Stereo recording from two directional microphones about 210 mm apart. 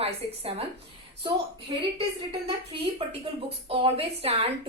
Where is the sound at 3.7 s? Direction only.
25° right (ahead or behind).